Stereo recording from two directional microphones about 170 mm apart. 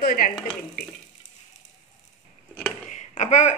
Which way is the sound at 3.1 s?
45° left (ahead or behind).